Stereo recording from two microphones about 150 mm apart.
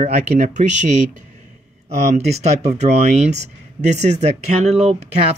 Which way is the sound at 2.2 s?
45° right (ahead or behind).